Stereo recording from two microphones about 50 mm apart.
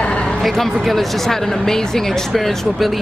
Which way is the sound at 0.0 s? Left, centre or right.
Left.